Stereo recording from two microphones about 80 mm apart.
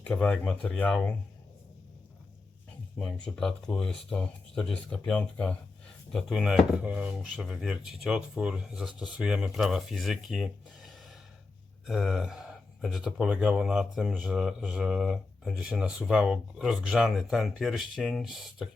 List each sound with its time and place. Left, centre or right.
0.2 s speech: centre
3.2 s speech: centre
6.1 s speech: centre
6.8 s speech: centre
7.4 s speech: centre